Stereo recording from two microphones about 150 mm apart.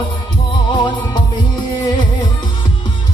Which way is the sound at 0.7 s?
30° left (ahead or behind).